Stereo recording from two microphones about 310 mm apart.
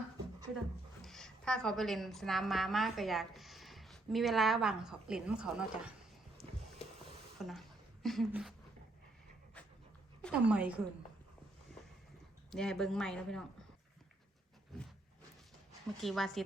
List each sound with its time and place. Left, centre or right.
1.0 s a woman's voice: centre
7.3 s a sound: centre
8.0 s speech: centre
10.2 s speech: centre
11.7 s a sound: centre
12.5 s speech: centre
16.0 s speech: centre